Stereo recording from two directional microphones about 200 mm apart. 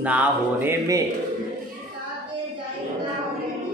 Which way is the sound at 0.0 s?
5° right (ahead or behind).